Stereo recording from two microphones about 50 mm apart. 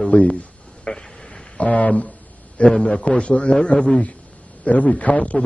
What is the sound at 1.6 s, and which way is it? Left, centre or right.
A man's voice, left.